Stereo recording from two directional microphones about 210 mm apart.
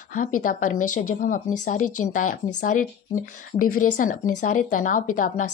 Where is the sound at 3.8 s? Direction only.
40° left (ahead or behind).